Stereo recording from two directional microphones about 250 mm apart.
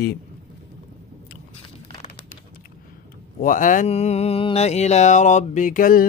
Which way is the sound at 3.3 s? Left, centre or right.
Left.